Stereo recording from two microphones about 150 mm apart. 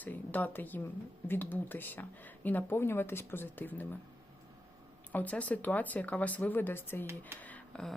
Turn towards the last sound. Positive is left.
turn(degrees=5)  # may be behind; listen again after turning